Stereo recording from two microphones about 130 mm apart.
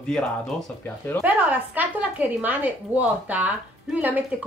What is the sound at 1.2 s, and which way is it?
A woman's voice, 15° right (ahead or behind).